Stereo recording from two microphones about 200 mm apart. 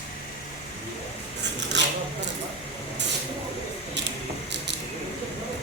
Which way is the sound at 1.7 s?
60° right (ahead or behind).